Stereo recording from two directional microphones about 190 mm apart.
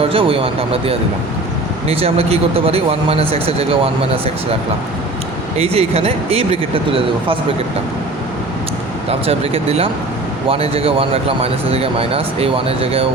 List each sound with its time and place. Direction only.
0.0 s speech: 30° right (ahead or behind)
5.5 s speech: 30° right (ahead or behind)
9.0 s speech: 30° right (ahead or behind)